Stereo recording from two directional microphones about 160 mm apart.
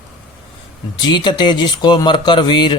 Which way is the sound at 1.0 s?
30° left (ahead or behind).